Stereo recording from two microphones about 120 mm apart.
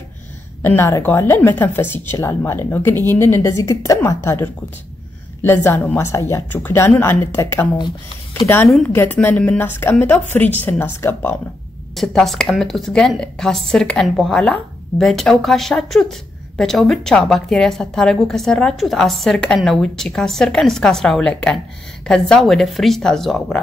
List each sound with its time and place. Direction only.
0.6 s a woman's voice: 20° left (ahead or behind)
8.6 s a woman's voice: 5° left (ahead or behind)
8.9 s a woman's voice: 15° left (ahead or behind)
11.9 s a woman's voice: centre (ahead or behind)